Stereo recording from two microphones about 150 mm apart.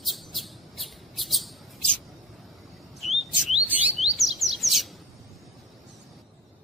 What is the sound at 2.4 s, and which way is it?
Chirp, centre (ahead or behind).